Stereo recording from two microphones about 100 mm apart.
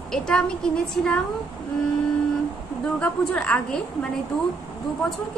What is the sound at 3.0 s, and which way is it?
A woman's voice, 10° left (ahead or behind).